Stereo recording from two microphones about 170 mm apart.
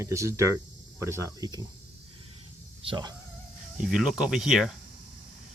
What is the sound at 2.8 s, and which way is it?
Speech, 25° right (ahead or behind).